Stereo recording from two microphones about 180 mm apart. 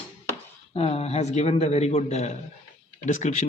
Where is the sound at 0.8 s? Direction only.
35° left (ahead or behind).